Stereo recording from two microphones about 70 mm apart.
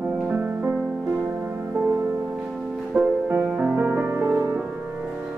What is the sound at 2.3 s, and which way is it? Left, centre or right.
Music, centre.